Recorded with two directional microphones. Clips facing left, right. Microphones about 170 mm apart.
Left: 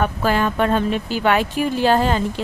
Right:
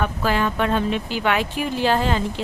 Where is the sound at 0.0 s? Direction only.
45° left (ahead or behind).